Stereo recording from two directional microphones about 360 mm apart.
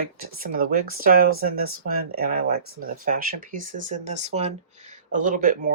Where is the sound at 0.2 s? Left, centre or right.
Right.